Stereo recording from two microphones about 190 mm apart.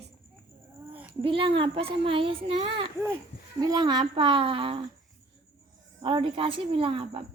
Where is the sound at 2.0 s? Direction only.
30° right (ahead or behind).